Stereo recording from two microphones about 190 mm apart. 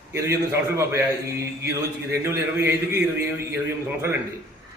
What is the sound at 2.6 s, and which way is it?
Speech, 15° right (ahead or behind).